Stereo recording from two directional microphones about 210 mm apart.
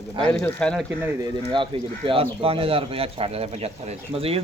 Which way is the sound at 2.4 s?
25° right (ahead or behind).